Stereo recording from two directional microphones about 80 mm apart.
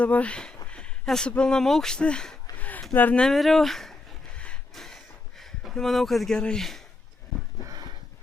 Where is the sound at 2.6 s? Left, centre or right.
Centre.